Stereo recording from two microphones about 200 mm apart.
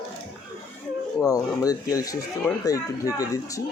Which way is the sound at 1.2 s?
15° left (ahead or behind).